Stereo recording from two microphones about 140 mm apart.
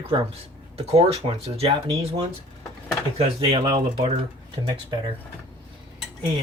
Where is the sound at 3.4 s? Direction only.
35° right (ahead or behind).